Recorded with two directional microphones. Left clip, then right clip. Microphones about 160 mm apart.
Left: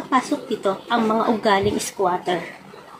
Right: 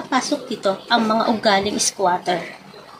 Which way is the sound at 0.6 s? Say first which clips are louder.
Right 3 dB; 20° right (ahead or behind).